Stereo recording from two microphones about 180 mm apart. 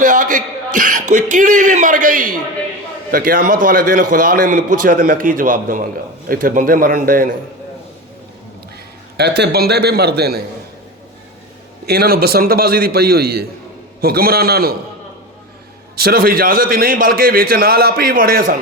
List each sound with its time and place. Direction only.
0.0 s a man's voice: 45° right (ahead or behind)
9.1 s a man's voice: 65° right (ahead or behind)
11.9 s a man's voice: 60° right (ahead or behind)
16.0 s a man's voice: 55° right (ahead or behind)